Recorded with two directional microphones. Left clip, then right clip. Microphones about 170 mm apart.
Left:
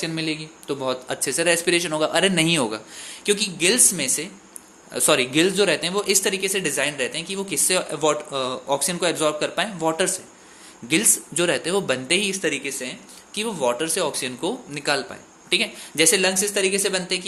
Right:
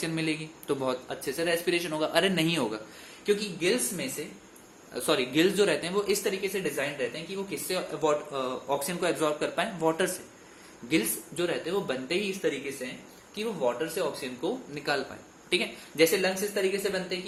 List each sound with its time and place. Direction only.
0.0 s speech: 15° left (ahead or behind)
1.0 s speech: 35° left (ahead or behind)
3.2 s speech: 55° left (ahead or behind)
4.9 s speech: 40° left (ahead or behind)
10.8 s speech: 45° left (ahead or behind); by 14.5 s 60° left (ahead or behind)
14.7 s speech: 40° left (ahead or behind)
16.0 s speech: 60° left (ahead or behind)